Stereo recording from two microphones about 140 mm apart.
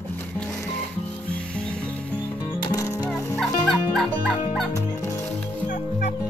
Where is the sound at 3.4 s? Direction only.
Centre (ahead or behind).